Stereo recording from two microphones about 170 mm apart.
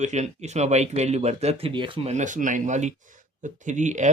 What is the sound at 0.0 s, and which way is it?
Speech, 40° right (ahead or behind).